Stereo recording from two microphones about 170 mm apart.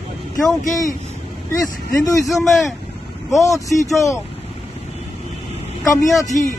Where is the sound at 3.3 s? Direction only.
20° left (ahead or behind).